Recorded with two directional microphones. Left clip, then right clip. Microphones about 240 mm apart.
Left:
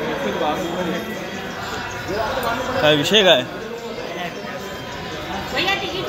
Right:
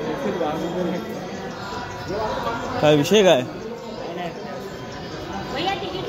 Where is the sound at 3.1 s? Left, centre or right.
Right.